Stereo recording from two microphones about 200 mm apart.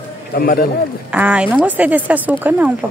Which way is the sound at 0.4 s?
50° left (ahead or behind).